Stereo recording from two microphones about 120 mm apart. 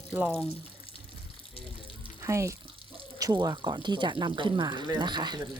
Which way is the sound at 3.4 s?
35° right (ahead or behind).